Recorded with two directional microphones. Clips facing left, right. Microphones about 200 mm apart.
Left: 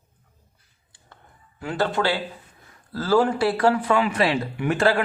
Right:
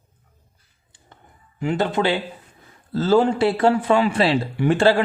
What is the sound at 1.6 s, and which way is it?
A man's voice, 20° right (ahead or behind).